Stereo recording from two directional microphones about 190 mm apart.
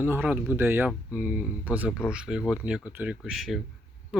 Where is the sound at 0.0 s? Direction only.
10° right (ahead or behind).